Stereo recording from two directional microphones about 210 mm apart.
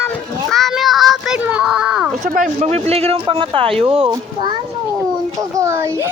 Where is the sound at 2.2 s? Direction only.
35° right (ahead or behind).